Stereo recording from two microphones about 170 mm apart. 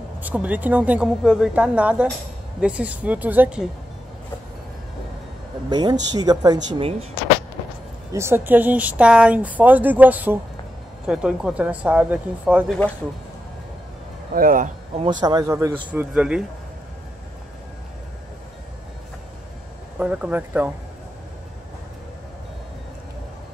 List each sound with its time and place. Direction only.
0.2 s speech: 10° right (ahead or behind)
5.7 s speech: 25° right (ahead or behind)
8.1 s speech: 15° right (ahead or behind)
12.6 s speech: 5° left (ahead or behind)
14.3 s speech: 55° right (ahead or behind)
15.0 s speech: 25° right (ahead or behind)
15.9 s speech: 5° right (ahead or behind)
20.0 s speech: 5° right (ahead or behind)